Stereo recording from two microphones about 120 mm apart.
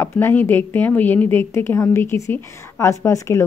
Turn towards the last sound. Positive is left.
turn(degrees=25)  # may be behind; listen again after turning